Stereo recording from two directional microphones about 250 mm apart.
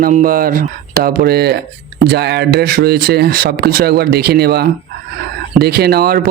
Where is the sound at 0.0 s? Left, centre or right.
Right.